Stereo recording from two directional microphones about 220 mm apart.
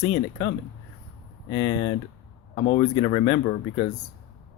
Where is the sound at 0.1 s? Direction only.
25° left (ahead or behind).